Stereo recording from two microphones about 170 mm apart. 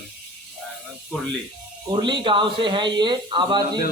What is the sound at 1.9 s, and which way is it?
A man's voice, 30° right (ahead or behind).